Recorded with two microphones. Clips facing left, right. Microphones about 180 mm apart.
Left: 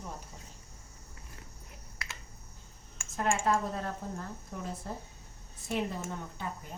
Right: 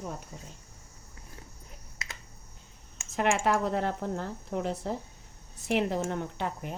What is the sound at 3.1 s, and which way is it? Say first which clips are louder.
A woman's voice: right 3 dB; 75° right (ahead or behind).